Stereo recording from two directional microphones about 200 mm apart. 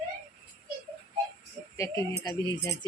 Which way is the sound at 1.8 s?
15° left (ahead or behind).